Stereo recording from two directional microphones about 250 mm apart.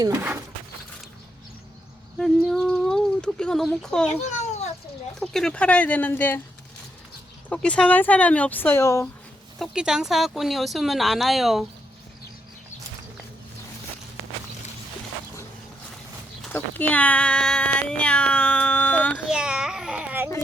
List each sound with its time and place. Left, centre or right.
0.0 s speech: centre
2.1 s a sound: centre
5.2 s speech: centre
7.5 s speech: centre
9.6 s speech: centre
16.5 s cat: centre